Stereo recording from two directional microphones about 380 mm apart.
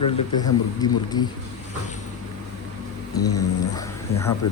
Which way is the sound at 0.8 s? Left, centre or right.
Centre.